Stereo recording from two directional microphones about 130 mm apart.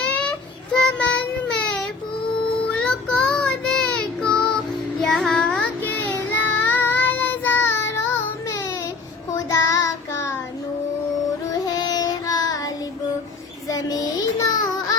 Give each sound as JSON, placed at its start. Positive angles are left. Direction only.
{"t": 0.0, "sound": "child singing", "side_deg": 10}
{"t": 1.5, "sound": "baby cry", "side_deg": 10}
{"t": 2.7, "sound": "child singing", "side_deg": 5}
{"t": 11.4, "sound": "child singing", "side_deg": 25}